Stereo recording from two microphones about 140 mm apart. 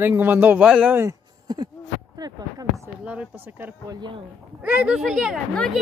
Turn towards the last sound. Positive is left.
turn(degrees=0)  # may be behind; listen again after turning